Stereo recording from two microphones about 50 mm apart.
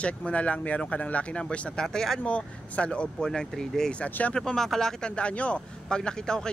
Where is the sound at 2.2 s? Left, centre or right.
Left.